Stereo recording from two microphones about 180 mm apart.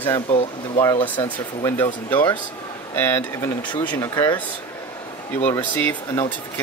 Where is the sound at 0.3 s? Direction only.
30° left (ahead or behind).